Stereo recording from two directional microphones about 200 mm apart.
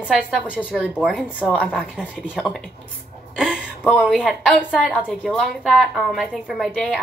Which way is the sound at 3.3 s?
5° right (ahead or behind).